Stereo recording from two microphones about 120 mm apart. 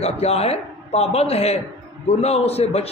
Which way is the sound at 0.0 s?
60° left (ahead or behind).